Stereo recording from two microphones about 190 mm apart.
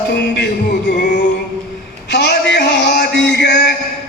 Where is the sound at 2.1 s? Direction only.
60° left (ahead or behind).